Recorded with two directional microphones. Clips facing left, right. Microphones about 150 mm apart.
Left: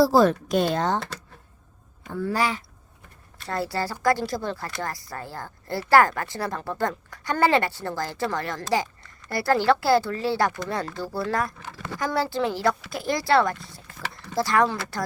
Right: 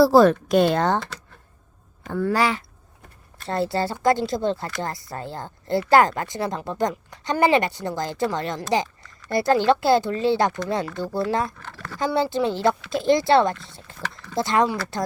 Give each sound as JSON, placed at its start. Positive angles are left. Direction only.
{"t": 0.0, "sound": "speech", "side_deg": -65}
{"t": 2.0, "sound": "speech", "side_deg": -60}
{"t": 3.5, "sound": "speech", "side_deg": -25}
{"t": 11.6, "sound": "speech", "side_deg": 15}
{"t": 11.9, "sound": "speech", "side_deg": -20}